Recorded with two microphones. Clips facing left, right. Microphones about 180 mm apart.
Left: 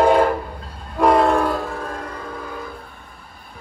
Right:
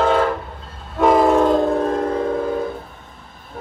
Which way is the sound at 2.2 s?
50° right (ahead or behind).